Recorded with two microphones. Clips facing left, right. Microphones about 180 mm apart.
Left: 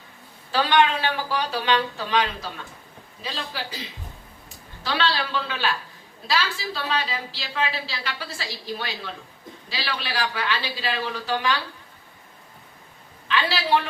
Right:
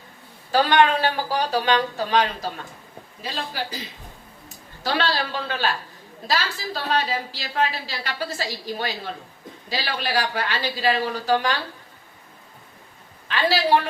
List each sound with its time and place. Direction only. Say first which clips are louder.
0.5 s a woman's voice: right 2 dB; 45° right (ahead or behind)
4.8 s a woman's voice: right 1 dB; 45° right (ahead or behind)
13.2 s a woman's voice: right 4 dB; 45° right (ahead or behind)